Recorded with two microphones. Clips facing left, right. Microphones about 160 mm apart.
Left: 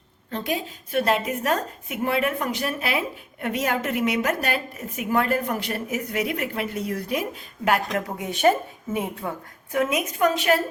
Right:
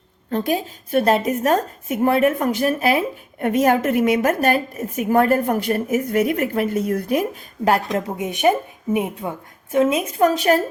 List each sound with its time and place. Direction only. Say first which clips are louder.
0.3 s a woman's voice: right 6 dB; 45° right (ahead or behind)
7.6 s a woman's voice: right 4 dB; 35° right (ahead or behind)
8.2 s a woman's voice: right 1 dB; 15° right (ahead or behind); by 10.6 s 40° right (ahead or behind)